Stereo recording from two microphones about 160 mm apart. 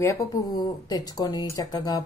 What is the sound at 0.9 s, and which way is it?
A woman's voice, 25° left (ahead or behind).